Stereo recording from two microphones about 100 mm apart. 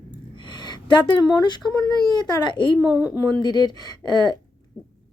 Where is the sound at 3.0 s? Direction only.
35° left (ahead or behind).